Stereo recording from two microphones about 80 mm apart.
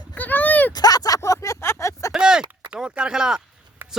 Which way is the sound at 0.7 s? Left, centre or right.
Left.